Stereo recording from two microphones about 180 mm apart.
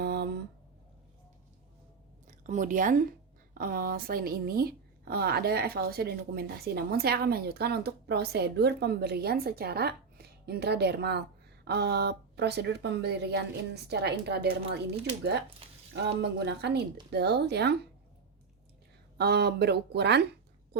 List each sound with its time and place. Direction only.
0.0 s a sound: 65° right (ahead or behind)
2.2 s speech: 45° right (ahead or behind); by 17.7 s 65° right (ahead or behind)
19.1 s speech: 65° right (ahead or behind)